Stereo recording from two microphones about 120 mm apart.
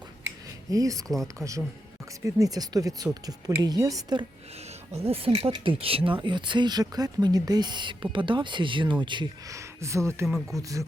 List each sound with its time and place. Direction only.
0.4 s a sound: 30° right (ahead or behind)
1.0 s speech: 5° left (ahead or behind)
2.2 s speech: 30° right (ahead or behind)
4.9 s speech: 55° right (ahead or behind); by 9.3 s 40° right (ahead or behind)
9.5 s speech: 25° right (ahead or behind)
10.2 s speech: centre (ahead or behind)
10.6 s speech: 25° right (ahead or behind)